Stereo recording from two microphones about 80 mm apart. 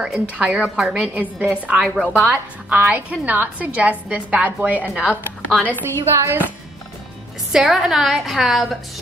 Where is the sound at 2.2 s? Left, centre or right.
Right.